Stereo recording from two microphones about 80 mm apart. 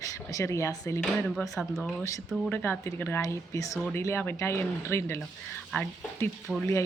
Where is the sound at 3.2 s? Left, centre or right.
Left.